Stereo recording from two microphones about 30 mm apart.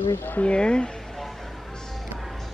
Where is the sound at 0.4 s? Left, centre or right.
Left.